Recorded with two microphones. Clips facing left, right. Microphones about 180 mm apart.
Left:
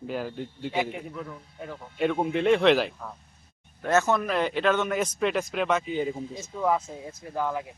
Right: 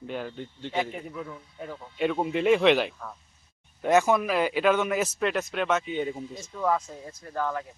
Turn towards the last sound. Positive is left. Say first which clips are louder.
# left 1 dB
turn(degrees=10)  # may be behind; listen again after turning